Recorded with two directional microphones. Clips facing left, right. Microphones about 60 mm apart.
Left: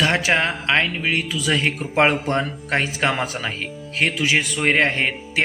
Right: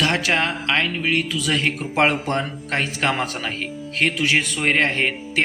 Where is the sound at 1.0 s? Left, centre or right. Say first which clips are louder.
Even; centre.